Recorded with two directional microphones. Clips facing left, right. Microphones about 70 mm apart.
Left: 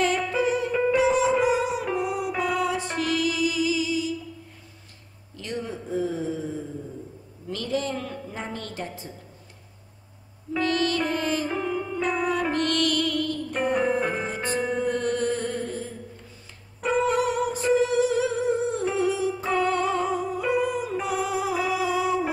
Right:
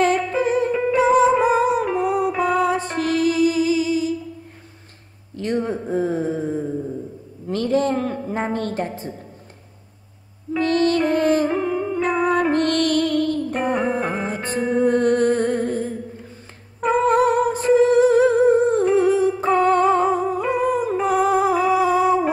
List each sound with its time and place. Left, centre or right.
0.0 s music: right
5.3 s a sound: right
10.6 s music: right
13.8 s music: right
14.5 s music: right